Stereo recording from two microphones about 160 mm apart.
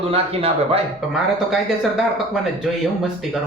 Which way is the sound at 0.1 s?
35° right (ahead or behind).